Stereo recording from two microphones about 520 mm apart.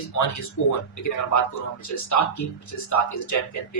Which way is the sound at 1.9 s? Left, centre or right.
Left.